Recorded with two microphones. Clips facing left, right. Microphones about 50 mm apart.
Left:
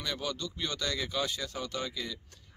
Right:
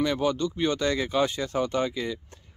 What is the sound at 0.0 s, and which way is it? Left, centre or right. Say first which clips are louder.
Speech: right 11 dB; right.